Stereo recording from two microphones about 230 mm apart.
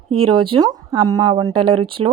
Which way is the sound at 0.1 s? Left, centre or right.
Right.